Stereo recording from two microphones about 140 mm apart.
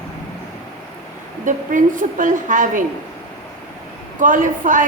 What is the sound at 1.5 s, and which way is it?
A woman's voice, 70° right (ahead or behind).